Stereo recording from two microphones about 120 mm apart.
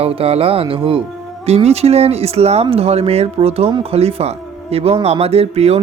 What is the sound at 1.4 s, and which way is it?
Speech, 60° right (ahead or behind).